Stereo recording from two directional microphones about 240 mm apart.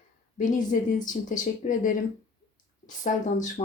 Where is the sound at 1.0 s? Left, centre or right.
Left.